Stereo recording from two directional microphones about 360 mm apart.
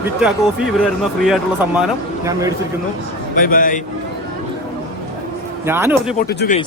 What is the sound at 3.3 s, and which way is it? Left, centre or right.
Speech, left.